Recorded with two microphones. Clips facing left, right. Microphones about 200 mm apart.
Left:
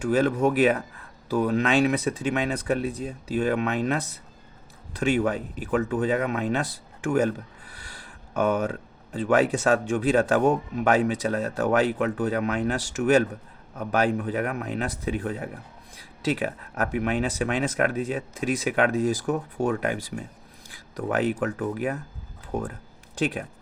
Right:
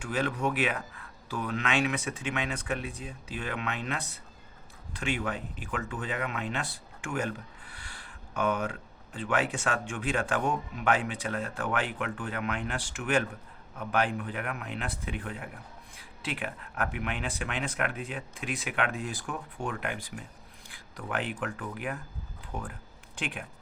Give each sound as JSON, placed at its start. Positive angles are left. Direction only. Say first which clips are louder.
{"t": 0.0, "sound": "speech", "louder": "left 9 dB", "side_deg": 40}